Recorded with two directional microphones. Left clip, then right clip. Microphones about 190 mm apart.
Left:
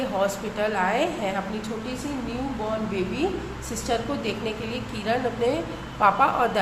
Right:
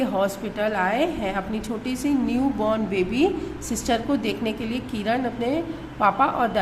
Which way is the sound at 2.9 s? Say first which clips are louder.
Right 5 dB; 25° right (ahead or behind).